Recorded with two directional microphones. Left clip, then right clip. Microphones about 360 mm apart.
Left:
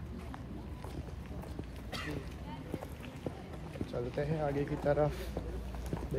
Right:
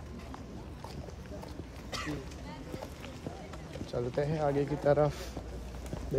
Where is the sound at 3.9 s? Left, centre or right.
Right.